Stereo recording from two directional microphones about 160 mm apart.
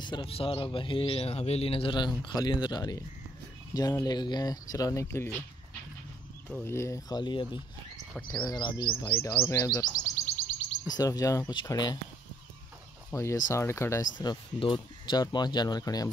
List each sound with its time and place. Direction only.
0.0 s speech: 30° left (ahead or behind)
6.5 s speech: 15° left (ahead or behind)
8.1 s speech: 10° left (ahead or behind)
8.5 s speech: 25° left (ahead or behind)
9.1 s speech: 15° left (ahead or behind)
9.7 s speech: 25° left (ahead or behind)
13.1 s speech: 20° left (ahead or behind)